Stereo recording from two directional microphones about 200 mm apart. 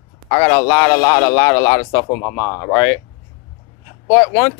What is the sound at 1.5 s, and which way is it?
Speech, 25° left (ahead or behind).